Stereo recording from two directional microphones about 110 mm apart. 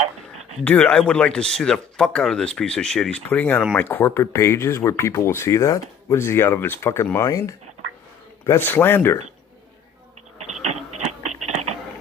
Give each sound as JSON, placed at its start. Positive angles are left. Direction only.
{"t": 0.6, "sound": "speech", "side_deg": 15}
{"t": 8.4, "sound": "speech", "side_deg": 20}
{"t": 10.5, "sound": "a sound", "side_deg": -90}